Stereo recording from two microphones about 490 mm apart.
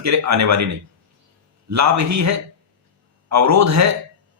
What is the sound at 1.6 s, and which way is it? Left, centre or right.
Speech, right.